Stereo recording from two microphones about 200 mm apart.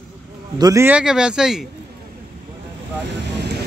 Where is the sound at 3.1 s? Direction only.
60° right (ahead or behind).